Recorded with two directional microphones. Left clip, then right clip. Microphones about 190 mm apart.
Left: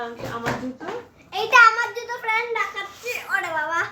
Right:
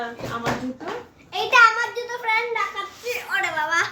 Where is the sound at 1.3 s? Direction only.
25° left (ahead or behind).